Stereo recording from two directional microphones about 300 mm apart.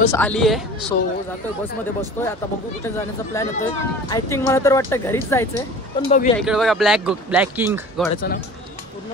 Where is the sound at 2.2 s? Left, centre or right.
Centre.